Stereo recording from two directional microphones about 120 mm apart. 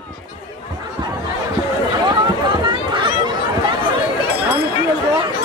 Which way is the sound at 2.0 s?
40° right (ahead or behind).